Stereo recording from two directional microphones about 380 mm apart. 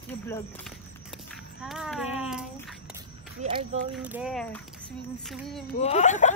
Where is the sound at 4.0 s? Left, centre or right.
Centre.